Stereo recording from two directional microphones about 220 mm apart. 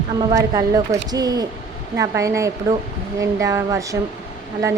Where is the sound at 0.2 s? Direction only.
15° right (ahead or behind).